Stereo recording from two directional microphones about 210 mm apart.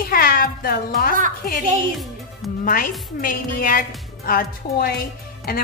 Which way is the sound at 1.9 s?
Centre (ahead or behind).